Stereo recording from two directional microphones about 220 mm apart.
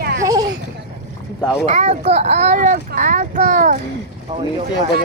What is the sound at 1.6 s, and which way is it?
A child's voice, 30° right (ahead or behind).